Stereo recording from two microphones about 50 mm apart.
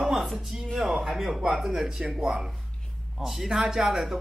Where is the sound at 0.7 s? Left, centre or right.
Centre.